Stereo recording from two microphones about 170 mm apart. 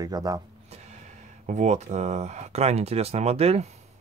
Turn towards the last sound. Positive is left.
turn(degrees=-35)  # may be behind; listen again after turning